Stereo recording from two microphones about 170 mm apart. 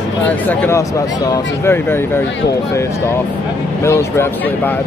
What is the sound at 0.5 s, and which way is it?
Speech, 15° left (ahead or behind).